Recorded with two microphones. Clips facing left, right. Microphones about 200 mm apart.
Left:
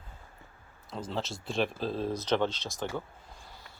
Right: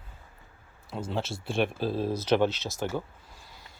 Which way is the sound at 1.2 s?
55° right (ahead or behind).